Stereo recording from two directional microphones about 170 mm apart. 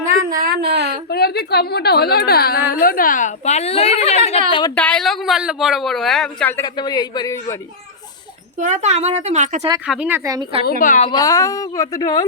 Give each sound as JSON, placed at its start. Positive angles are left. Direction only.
{"t": 0.3, "sound": "speech", "side_deg": -60}
{"t": 1.1, "sound": "a woman's voice", "side_deg": 70}
{"t": 4.7, "sound": "speech", "side_deg": 5}
{"t": 6.6, "sound": "a woman's voice", "side_deg": 25}
{"t": 8.6, "sound": "a woman's voice", "side_deg": -45}
{"t": 9.8, "sound": "speech", "side_deg": -5}
{"t": 10.7, "sound": "a woman's voice", "side_deg": 50}
{"t": 11.1, "sound": "a woman's voice", "side_deg": 20}